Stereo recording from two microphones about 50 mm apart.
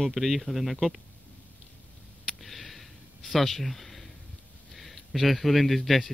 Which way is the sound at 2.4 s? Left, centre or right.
Centre.